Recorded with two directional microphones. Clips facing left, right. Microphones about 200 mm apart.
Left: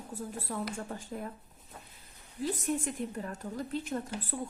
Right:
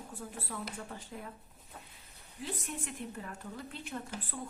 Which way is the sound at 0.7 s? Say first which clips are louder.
Left 5 dB; 45° left (ahead or behind).